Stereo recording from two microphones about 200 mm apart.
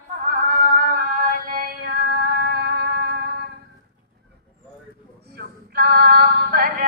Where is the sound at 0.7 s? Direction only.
45° right (ahead or behind).